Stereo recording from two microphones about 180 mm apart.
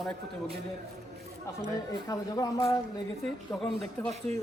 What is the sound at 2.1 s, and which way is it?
Speech, 20° left (ahead or behind).